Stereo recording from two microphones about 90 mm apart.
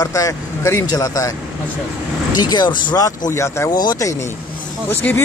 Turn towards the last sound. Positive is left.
turn(degrees=25)  # may be behind; listen again after turning